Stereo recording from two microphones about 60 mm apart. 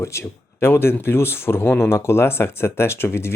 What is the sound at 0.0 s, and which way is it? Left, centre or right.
Speech, left.